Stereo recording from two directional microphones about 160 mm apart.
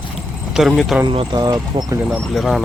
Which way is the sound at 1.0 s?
30° right (ahead or behind).